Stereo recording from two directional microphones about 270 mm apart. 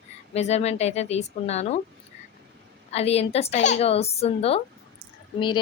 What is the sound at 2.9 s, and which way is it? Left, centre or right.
A woman's voice, left.